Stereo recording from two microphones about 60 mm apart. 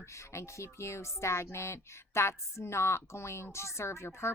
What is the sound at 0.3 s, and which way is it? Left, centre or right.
Speech, left.